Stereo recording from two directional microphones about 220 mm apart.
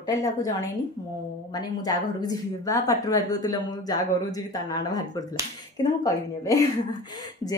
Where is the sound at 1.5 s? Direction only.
15° left (ahead or behind).